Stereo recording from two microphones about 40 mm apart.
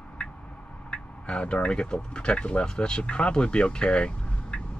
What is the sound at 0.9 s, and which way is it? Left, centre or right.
Speech, left.